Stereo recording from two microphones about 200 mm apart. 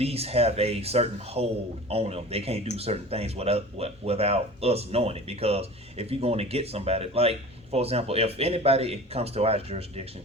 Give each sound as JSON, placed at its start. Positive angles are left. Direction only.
{"t": 0.0, "sound": "speech", "side_deg": -30}